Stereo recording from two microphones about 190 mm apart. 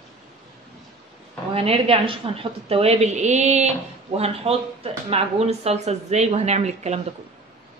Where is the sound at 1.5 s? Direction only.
30° right (ahead or behind).